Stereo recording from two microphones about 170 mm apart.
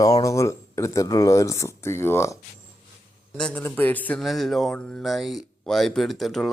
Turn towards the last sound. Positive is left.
turn(degrees=0)  # may be behind; listen again after turning